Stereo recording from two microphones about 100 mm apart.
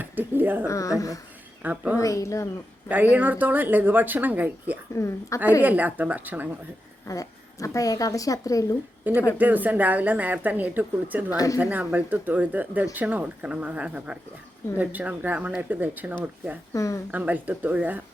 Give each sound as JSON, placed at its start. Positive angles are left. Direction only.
{"t": 0.0, "sound": "a sound", "side_deg": -20}
{"t": 0.7, "sound": "speech", "side_deg": 35}
{"t": 1.6, "sound": "speech", "side_deg": -15}
{"t": 2.0, "sound": "speech", "side_deg": 30}
{"t": 2.9, "sound": "speech", "side_deg": -15}
{"t": 4.9, "sound": "a woman's voice", "side_deg": 30}
{"t": 5.6, "sound": "speech", "side_deg": -15}
{"t": 7.1, "sound": "speech", "side_deg": 35}
{"t": 9.1, "sound": "speech", "side_deg": -15}
{"t": 11.3, "sound": "speech", "side_deg": 35}
{"t": 11.6, "sound": "speech", "side_deg": -15}
{"t": 16.7, "sound": "speech", "side_deg": 35}
{"t": 17.1, "sound": "speech", "side_deg": -15}